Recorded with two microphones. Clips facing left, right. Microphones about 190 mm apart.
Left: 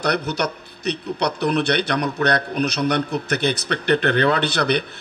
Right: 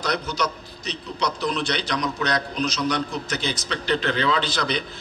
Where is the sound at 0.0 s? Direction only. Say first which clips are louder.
Left 4 dB; 65° left (ahead or behind).